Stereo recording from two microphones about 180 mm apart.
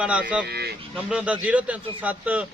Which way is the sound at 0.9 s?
5° right (ahead or behind).